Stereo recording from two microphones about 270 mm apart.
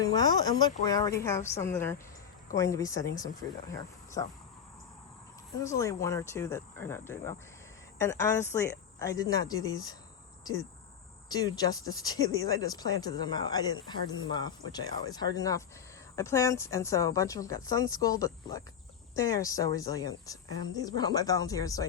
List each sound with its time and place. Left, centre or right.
0.0 s speech: centre
5.5 s speech: centre